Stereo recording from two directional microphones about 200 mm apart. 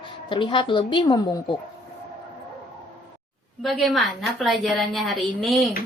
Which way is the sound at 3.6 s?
Centre (ahead or behind).